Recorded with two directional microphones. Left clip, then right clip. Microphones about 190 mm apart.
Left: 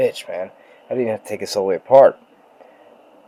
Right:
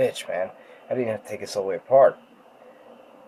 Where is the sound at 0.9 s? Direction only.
40° left (ahead or behind).